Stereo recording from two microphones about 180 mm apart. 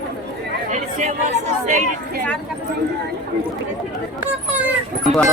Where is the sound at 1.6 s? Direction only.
40° right (ahead or behind).